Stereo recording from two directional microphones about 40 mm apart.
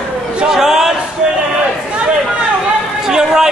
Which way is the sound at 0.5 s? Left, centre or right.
Centre.